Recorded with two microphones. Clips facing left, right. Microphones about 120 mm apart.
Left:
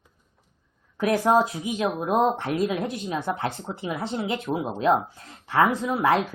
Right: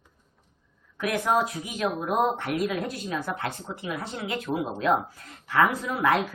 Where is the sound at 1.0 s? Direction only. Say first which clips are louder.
Left 5 dB; 30° left (ahead or behind).